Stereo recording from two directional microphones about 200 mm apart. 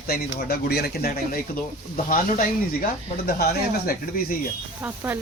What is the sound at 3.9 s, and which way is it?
Speech, 45° left (ahead or behind).